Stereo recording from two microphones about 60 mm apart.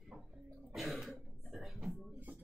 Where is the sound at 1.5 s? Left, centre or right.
Centre.